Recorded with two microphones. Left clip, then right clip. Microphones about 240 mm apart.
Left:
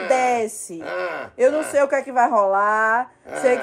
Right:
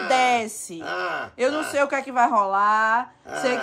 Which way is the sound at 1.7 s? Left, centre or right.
Right.